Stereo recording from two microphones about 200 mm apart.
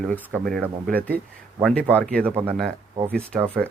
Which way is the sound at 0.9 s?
50° right (ahead or behind).